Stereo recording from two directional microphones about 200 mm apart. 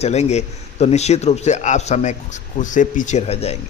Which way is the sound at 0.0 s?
35° left (ahead or behind).